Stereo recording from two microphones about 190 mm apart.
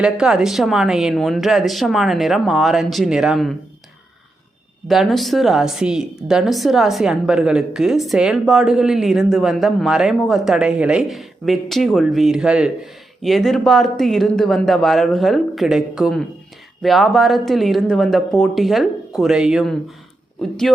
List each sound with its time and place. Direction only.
0.0 s a woman's voice: 5° right (ahead or behind)
4.9 s a woman's voice: centre (ahead or behind)